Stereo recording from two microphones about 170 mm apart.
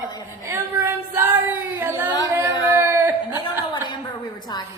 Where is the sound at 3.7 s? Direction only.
25° left (ahead or behind).